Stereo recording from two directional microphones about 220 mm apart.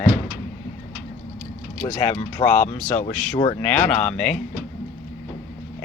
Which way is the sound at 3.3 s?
20° left (ahead or behind).